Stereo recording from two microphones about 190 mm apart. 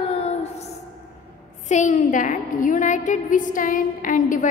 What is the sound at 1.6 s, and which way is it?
A woman's voice, 40° left (ahead or behind).